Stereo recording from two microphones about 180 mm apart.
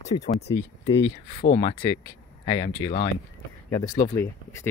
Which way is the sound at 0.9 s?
65° left (ahead or behind).